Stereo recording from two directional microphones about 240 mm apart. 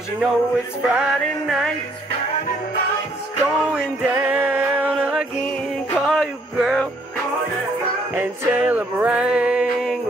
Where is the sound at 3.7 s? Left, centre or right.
Centre.